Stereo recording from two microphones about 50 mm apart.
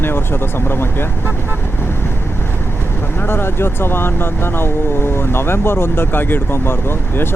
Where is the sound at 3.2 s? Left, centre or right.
Left.